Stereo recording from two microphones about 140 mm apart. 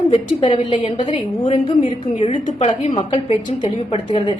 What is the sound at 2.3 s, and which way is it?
Speech, 55° left (ahead or behind).